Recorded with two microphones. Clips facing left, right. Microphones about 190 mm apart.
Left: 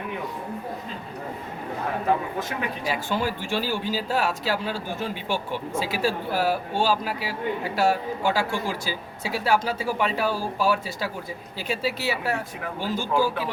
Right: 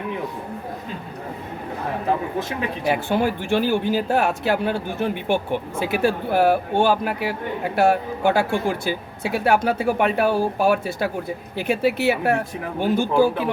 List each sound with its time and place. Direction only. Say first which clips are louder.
2.8 s speech: right 7 dB; 55° right (ahead or behind)